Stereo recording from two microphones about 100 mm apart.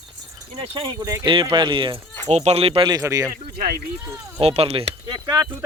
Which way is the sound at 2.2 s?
90° right.